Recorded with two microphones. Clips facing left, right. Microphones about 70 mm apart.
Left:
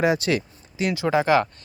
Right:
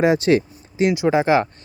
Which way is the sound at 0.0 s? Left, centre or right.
Right.